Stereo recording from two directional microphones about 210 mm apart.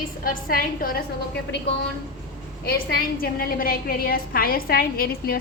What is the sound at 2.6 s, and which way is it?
A woman's voice, 50° left (ahead or behind).